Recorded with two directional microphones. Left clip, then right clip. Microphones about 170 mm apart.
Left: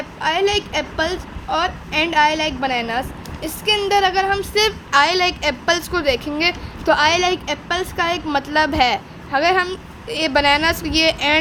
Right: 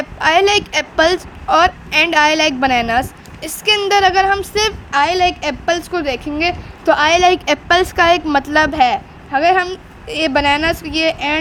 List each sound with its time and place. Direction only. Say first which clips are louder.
0.2 s a woman's voice: right 6 dB; 30° right (ahead or behind); by 11.3 s 10° right (ahead or behind)